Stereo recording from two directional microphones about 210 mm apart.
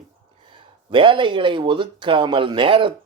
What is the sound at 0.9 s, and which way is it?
Speech, 25° right (ahead or behind).